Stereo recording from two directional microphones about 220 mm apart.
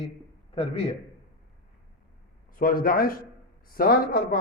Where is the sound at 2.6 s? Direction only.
40° left (ahead or behind).